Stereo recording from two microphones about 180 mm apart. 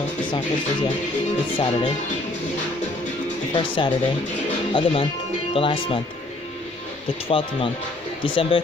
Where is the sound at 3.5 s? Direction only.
25° left (ahead or behind).